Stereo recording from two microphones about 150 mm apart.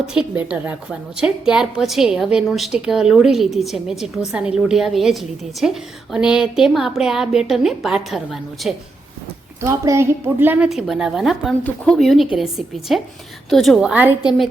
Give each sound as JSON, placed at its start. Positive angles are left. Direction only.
{"t": 0.0, "sound": "a woman's voice", "side_deg": -5}
{"t": 9.6, "sound": "a woman's voice", "side_deg": -20}